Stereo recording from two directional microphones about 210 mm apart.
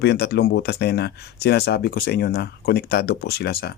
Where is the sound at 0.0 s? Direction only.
50° left (ahead or behind).